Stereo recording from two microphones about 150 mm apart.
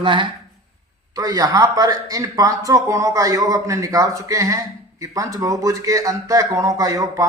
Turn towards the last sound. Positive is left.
turn(degrees=-20)  # may be behind; listen again after turning